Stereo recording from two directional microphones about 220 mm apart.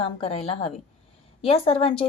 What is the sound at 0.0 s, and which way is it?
Speech, 25° left (ahead or behind).